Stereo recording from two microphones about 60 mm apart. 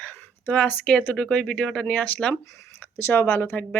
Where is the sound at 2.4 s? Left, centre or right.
Left.